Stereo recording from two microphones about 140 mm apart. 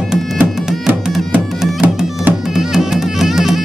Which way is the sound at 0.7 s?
5° right (ahead or behind).